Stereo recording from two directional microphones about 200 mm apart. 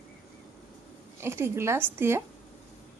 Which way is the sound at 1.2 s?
10° right (ahead or behind).